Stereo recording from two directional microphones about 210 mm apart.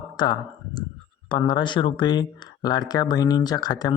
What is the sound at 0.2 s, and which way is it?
A man's voice, 20° left (ahead or behind).